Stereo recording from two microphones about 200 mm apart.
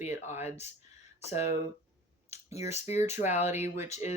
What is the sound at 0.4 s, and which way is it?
Speech, 35° left (ahead or behind).